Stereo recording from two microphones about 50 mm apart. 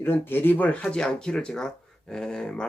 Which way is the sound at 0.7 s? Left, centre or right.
Centre.